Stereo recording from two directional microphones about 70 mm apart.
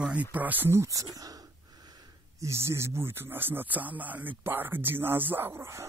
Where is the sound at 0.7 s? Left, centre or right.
Right.